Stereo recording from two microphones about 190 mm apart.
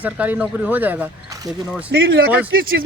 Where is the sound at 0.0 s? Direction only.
10° right (ahead or behind).